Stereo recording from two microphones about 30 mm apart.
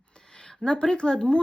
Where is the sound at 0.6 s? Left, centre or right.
Left.